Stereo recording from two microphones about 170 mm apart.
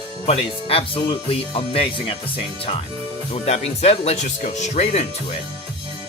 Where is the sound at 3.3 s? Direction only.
40° left (ahead or behind).